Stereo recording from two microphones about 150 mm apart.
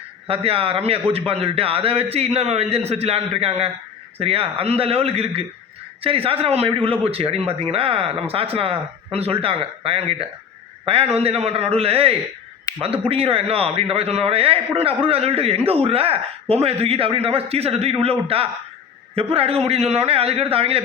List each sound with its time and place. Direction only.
0.3 s a man's voice: 40° right (ahead or behind)